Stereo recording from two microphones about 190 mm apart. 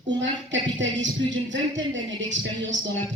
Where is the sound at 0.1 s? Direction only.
75° right (ahead or behind).